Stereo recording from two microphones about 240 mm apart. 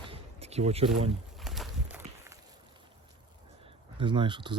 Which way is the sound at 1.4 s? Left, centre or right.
Centre.